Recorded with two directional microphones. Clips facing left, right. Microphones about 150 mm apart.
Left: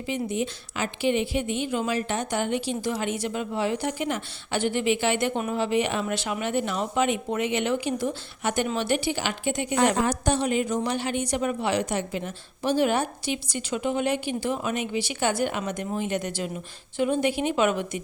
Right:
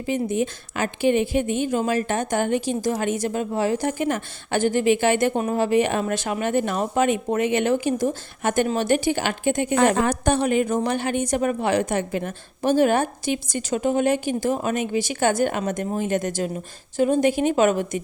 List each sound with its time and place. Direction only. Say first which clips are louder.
0.0 s a woman's voice: right 5 dB; 45° right (ahead or behind)